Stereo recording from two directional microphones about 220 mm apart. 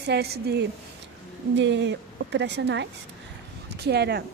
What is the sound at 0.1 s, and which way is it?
Speech, 45° right (ahead or behind).